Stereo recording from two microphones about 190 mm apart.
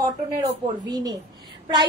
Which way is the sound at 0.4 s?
20° right (ahead or behind).